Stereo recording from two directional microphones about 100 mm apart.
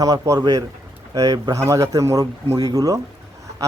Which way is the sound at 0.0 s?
40° right (ahead or behind).